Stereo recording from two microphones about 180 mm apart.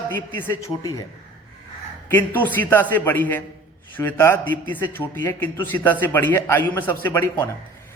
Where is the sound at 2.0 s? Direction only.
10° left (ahead or behind).